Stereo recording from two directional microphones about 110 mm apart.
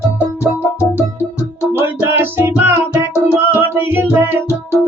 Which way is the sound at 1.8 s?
20° right (ahead or behind).